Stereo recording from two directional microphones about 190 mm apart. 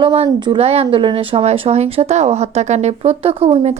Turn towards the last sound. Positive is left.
turn(degrees=-30)  # may be behind; listen again after turning